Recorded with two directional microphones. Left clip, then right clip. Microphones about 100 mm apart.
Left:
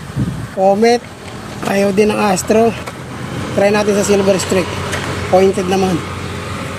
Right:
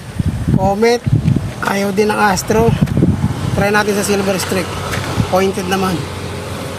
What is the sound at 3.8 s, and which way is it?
Speech, 35° right (ahead or behind).